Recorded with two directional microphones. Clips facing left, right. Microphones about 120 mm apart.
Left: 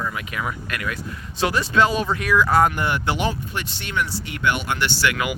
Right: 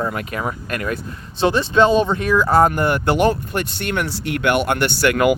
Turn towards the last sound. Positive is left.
turn(degrees=-50)  # may be behind; listen again after turning